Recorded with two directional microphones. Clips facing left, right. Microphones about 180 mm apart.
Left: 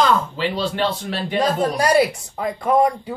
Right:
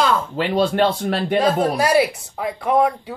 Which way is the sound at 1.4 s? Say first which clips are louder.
Left 1 dB; 5° right (ahead or behind).